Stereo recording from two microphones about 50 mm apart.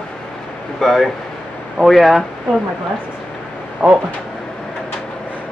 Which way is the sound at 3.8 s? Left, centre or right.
Right.